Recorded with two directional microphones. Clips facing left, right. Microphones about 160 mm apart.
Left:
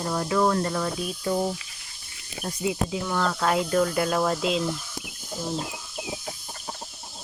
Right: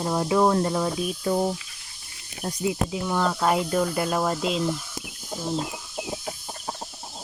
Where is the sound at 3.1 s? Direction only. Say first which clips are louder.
Right 2 dB; 10° right (ahead or behind).